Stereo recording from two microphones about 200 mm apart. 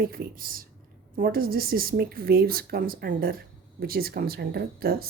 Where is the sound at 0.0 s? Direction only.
45° right (ahead or behind).